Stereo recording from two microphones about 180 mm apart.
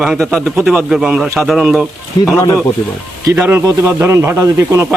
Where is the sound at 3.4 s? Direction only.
10° right (ahead or behind).